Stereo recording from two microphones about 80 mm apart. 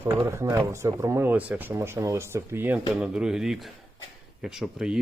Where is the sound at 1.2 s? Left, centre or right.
Right.